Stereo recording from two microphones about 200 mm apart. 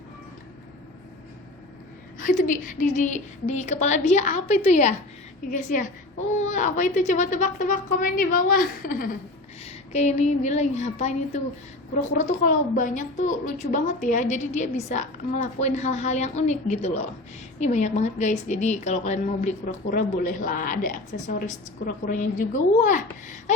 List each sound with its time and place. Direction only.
2.1 s a woman's voice: 40° left (ahead or behind)
9.6 s a woman's voice: 35° left (ahead or behind)